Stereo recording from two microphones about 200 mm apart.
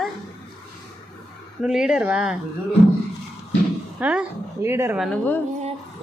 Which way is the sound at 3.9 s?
5° right (ahead or behind).